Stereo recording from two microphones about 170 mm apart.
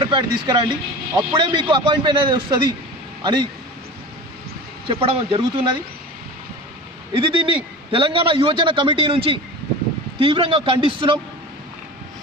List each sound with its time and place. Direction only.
0.0 s speech: 30° right (ahead or behind)
4.9 s a man's voice: 35° right (ahead or behind)
7.1 s a man's voice: 30° right (ahead or behind)